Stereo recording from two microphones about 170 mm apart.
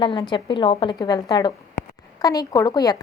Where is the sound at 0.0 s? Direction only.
30° left (ahead or behind).